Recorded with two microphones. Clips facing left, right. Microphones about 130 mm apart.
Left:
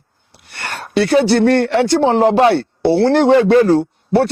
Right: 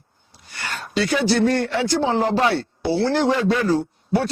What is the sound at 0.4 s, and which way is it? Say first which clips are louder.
A man's voice: left 4 dB; 65° left (ahead or behind).